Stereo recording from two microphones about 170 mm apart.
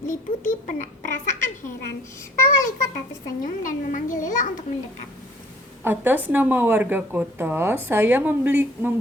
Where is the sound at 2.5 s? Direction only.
55° left (ahead or behind).